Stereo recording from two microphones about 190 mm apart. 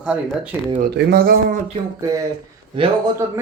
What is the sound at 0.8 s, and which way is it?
Speech, 55° right (ahead or behind).